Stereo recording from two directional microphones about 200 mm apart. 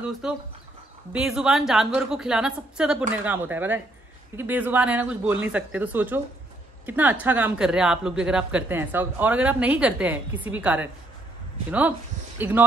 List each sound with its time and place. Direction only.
0.2 s a woman's voice: 5° right (ahead or behind)
12.4 s speech: 10° right (ahead or behind)